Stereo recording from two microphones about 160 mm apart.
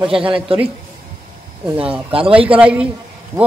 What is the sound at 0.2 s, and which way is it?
Speech, 35° right (ahead or behind).